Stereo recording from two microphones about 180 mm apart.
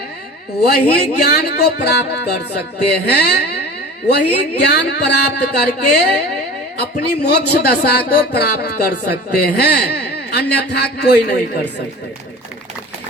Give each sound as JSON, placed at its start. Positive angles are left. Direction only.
{"t": 0.6, "sound": "speech", "side_deg": 60}